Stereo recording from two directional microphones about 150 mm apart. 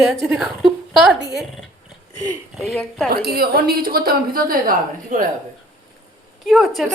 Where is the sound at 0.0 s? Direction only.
Centre (ahead or behind).